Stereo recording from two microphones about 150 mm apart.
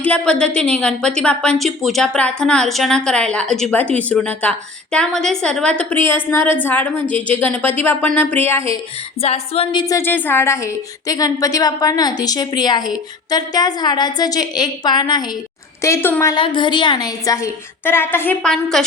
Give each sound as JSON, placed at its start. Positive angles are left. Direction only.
{"t": 0.0, "sound": "a woman's voice", "side_deg": 10}
{"t": 9.2, "sound": "a sound", "side_deg": 40}
{"t": 10.0, "sound": "a woman's voice", "side_deg": 15}
{"t": 15.8, "sound": "a woman's voice", "side_deg": 15}
{"t": 16.3, "sound": "a woman's voice", "side_deg": 30}
{"t": 18.5, "sound": "a woman's voice", "side_deg": 0}